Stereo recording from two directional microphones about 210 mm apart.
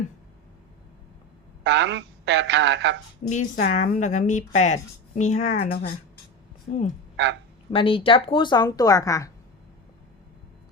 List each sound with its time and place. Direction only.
1.6 s speech: 55° right (ahead or behind)
3.2 s speech: 35° left (ahead or behind)
6.7 s speech: 50° left (ahead or behind)
7.7 s speech: 25° left (ahead or behind)